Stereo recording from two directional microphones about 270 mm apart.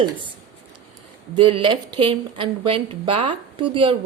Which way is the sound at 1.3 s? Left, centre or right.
Centre.